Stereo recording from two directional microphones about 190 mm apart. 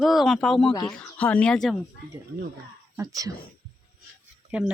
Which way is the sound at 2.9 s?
20° right (ahead or behind).